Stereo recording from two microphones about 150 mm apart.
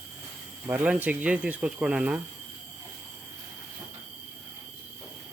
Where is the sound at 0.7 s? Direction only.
10° right (ahead or behind).